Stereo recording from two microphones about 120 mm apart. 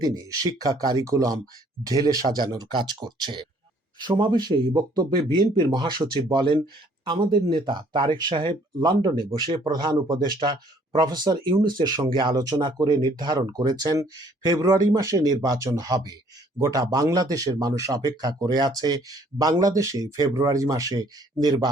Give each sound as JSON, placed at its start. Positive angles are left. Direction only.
{"t": 0.0, "sound": "speech", "side_deg": -35}